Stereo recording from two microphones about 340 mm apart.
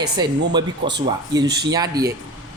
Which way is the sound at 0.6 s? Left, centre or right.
Right.